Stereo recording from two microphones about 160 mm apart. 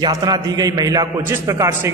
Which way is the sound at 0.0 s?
25° right (ahead or behind).